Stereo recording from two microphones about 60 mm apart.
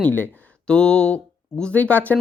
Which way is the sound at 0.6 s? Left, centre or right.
Centre.